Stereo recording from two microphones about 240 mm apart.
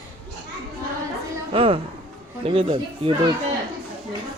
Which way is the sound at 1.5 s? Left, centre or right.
Right.